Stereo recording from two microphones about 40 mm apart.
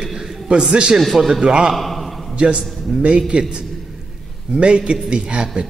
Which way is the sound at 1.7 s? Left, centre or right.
Centre.